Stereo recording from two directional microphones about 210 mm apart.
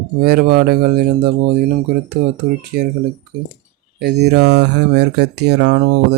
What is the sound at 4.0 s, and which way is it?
Speech, 55° right (ahead or behind).